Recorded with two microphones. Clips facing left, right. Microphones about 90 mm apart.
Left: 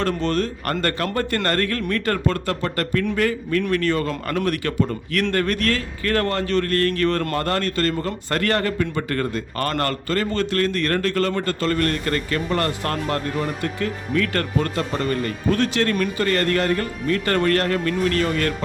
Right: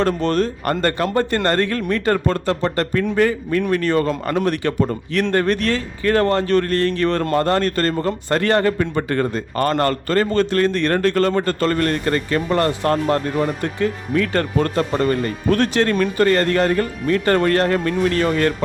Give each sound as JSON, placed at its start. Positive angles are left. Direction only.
{"t": 0.2, "sound": "speech", "side_deg": -35}
{"t": 0.6, "sound": "a man's voice", "side_deg": -20}
{"t": 7.6, "sound": "a man's voice", "side_deg": -35}
{"t": 10.1, "sound": "a man's voice", "side_deg": -35}
{"t": 14.6, "sound": "speech", "side_deg": -35}
{"t": 15.5, "sound": "speech", "side_deg": -45}
{"t": 15.8, "sound": "a man's voice", "side_deg": -30}
{"t": 16.4, "sound": "a man's voice", "side_deg": -30}